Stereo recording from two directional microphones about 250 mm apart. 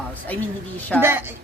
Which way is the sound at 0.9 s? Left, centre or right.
Centre.